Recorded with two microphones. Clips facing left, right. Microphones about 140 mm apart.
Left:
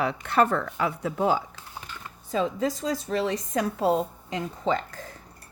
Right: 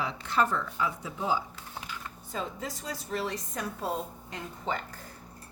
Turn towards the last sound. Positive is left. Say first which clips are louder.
# left 8 dB
turn(degrees=90)